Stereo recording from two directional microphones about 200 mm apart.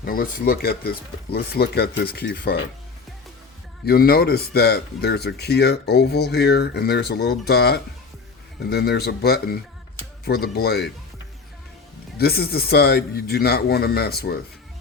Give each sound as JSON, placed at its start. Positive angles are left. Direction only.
{"t": 0.0, "sound": "speech", "side_deg": 45}
{"t": 3.8, "sound": "speech", "side_deg": 50}
{"t": 12.1, "sound": "speech", "side_deg": 50}